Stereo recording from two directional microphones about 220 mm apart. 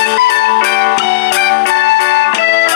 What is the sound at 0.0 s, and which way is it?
Music, 50° left (ahead or behind).